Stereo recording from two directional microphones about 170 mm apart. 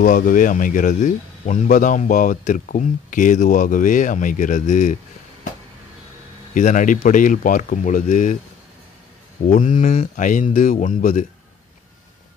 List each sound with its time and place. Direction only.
0.0 s speech: 55° left (ahead or behind)
6.5 s speech: 50° left (ahead or behind)
9.5 s speech: 50° left (ahead or behind)